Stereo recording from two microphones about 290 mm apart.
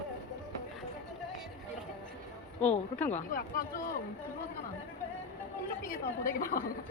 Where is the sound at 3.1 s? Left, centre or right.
Left.